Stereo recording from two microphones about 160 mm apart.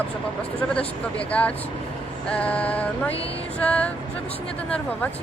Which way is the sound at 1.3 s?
10° left (ahead or behind).